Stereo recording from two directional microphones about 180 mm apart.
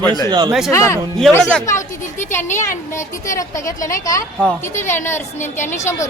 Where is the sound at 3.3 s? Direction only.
15° left (ahead or behind).